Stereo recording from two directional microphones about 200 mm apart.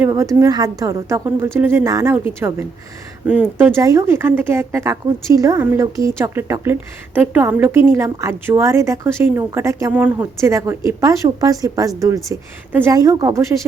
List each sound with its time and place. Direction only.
0.0 s speech: 15° right (ahead or behind)